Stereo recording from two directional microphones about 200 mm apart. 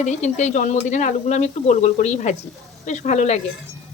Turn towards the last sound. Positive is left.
turn(degrees=35)  # may be behind; listen again after turning